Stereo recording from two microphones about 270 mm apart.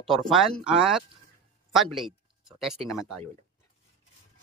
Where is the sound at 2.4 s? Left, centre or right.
Centre.